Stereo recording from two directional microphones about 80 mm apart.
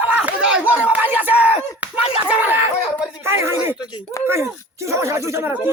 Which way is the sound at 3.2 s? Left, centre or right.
Right.